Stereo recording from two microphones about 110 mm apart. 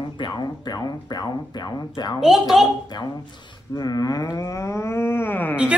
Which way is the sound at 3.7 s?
35° left (ahead or behind).